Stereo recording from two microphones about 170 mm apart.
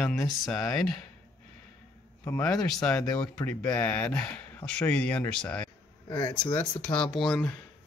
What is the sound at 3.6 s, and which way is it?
Speech, 10° left (ahead or behind).